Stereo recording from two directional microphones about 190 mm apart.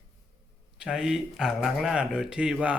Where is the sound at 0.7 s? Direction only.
5° right (ahead or behind).